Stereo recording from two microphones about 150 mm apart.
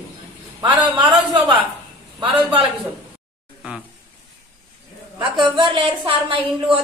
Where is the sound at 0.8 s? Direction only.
35° right (ahead or behind).